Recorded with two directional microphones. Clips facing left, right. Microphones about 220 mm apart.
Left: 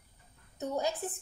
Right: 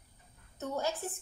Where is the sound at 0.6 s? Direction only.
15° left (ahead or behind).